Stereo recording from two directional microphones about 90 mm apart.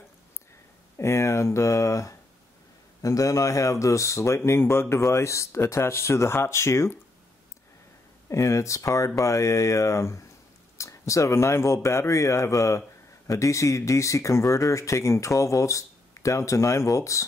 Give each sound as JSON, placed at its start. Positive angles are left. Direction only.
{"t": 0.9, "sound": "speech", "side_deg": 30}
{"t": 8.3, "sound": "speech", "side_deg": 35}